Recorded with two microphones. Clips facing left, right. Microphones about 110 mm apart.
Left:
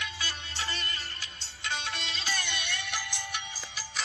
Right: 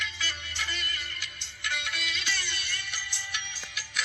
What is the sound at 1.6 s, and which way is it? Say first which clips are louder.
Music: even; 25° left (ahead or behind).